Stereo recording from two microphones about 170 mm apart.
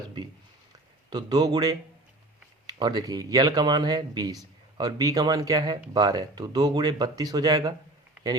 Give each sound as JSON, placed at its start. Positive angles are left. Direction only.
{"t": 1.1, "sound": "speech", "side_deg": -25}